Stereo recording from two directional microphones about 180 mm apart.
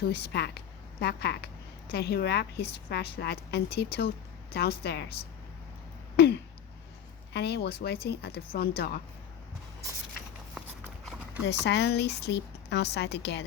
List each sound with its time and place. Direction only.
0.0 s a woman's voice: 65° left (ahead or behind)
6.1 s a sound: 65° left (ahead or behind)
7.3 s speech: 65° left (ahead or behind)
11.6 s speech: 70° left (ahead or behind)